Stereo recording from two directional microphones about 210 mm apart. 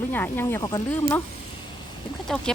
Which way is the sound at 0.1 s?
10° left (ahead or behind).